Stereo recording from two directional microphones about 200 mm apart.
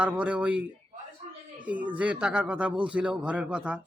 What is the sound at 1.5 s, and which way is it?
Speech, 5° right (ahead or behind).